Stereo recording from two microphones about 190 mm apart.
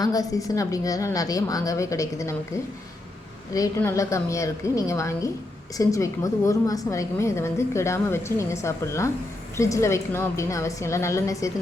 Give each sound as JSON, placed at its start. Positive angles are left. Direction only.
{"t": 0.0, "sound": "a woman's voice", "side_deg": 20}
{"t": 3.5, "sound": "a woman's voice", "side_deg": 15}